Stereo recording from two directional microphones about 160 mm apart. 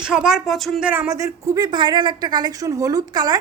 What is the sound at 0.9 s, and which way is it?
A woman's voice, 15° right (ahead or behind).